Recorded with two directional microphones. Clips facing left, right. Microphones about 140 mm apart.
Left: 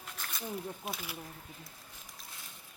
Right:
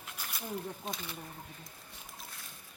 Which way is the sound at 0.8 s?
5° left (ahead or behind).